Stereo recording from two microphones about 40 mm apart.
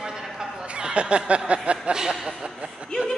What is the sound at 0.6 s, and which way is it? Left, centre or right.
Speech, right.